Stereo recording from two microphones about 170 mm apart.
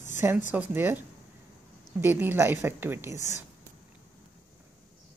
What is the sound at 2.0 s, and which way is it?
A woman's voice, 10° right (ahead or behind).